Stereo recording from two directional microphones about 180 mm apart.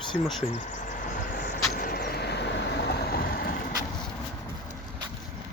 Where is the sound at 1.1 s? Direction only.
50° left (ahead or behind).